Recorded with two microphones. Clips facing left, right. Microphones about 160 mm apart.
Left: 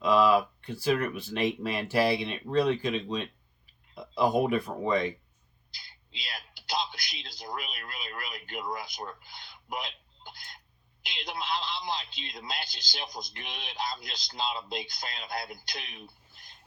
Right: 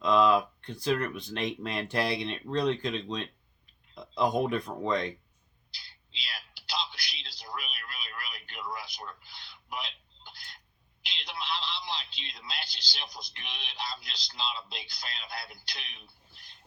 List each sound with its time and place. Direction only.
0.0 s speech: 5° left (ahead or behind)
6.1 s a sound: 45° left (ahead or behind)
8.4 s speech: 45° left (ahead or behind)
11.0 s telephone: 45° left (ahead or behind)
11.9 s speech: 45° left (ahead or behind)